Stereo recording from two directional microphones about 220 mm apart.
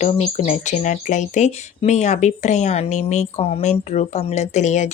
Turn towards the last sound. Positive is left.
turn(degrees=35)  # may be behind; listen again after turning